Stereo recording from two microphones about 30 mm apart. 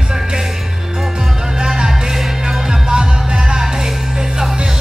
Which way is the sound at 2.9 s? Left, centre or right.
Right.